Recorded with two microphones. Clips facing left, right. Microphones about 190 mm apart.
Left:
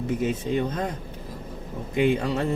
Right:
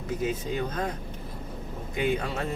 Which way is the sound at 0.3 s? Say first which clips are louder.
Left 4 dB; 25° left (ahead or behind).